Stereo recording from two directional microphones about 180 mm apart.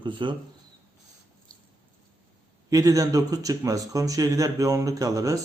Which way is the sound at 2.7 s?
20° right (ahead or behind).